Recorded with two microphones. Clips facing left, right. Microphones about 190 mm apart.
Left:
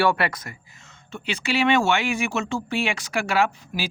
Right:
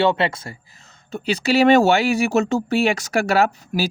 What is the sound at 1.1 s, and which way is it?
Speech, 40° right (ahead or behind).